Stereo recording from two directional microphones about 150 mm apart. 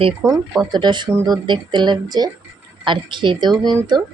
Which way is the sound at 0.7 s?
30° right (ahead or behind).